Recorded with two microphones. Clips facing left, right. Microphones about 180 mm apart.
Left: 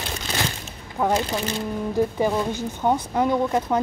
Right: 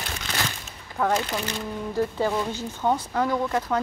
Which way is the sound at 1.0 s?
20° left (ahead or behind).